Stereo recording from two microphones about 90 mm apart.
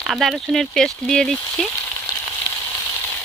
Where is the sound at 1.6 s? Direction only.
5° left (ahead or behind).